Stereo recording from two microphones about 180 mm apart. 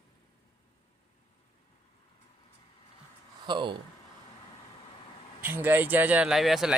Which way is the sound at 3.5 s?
25° right (ahead or behind).